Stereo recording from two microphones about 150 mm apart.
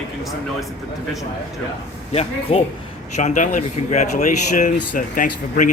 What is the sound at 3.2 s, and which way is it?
Speech, 55° left (ahead or behind).